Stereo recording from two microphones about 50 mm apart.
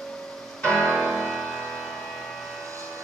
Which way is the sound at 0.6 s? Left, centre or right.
Centre.